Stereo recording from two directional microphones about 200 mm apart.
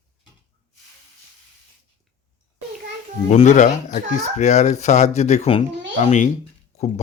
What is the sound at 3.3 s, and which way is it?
Speech, 35° left (ahead or behind).